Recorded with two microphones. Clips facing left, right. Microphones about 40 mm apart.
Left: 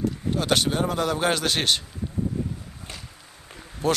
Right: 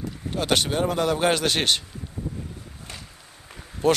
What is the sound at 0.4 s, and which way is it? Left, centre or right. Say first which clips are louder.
Speech: right 1 dB; right.